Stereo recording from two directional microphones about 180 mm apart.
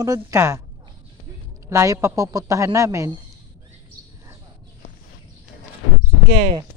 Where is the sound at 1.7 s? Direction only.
15° right (ahead or behind).